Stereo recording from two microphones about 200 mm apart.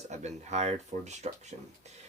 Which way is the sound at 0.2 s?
35° right (ahead or behind).